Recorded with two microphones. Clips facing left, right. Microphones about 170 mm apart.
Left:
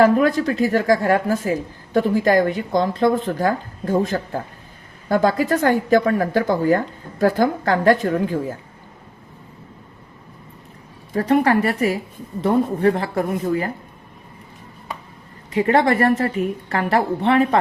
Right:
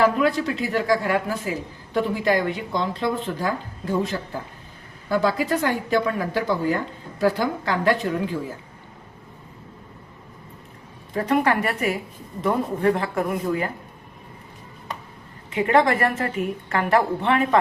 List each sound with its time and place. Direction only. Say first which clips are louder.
0.0 s a woman's voice: left 5 dB; 45° left (ahead or behind)
11.2 s a woman's voice: left 4 dB; 35° left (ahead or behind)
15.5 s a woman's voice: left 2 dB; 35° left (ahead or behind)